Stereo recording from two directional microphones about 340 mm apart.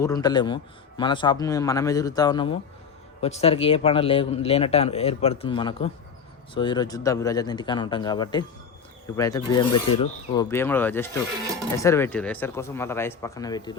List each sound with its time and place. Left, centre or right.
0.0 s speech: centre